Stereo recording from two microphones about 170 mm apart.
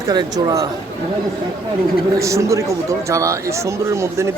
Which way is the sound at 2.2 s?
20° right (ahead or behind).